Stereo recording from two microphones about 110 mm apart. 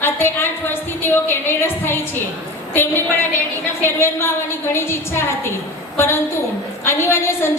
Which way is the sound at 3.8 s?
20° left (ahead or behind).